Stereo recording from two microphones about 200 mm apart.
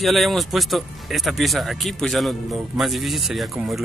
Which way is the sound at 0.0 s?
Centre (ahead or behind).